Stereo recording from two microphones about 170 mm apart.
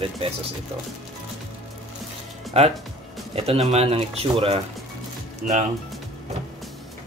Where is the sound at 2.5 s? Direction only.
40° right (ahead or behind).